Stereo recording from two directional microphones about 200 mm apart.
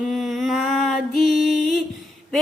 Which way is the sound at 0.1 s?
Centre (ahead or behind).